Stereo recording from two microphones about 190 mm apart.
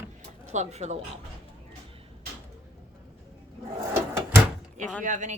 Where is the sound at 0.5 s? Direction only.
35° right (ahead or behind).